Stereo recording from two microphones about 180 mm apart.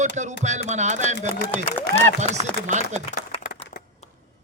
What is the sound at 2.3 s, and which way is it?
Speech, 40° right (ahead or behind).